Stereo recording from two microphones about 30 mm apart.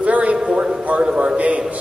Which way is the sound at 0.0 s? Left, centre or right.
Right.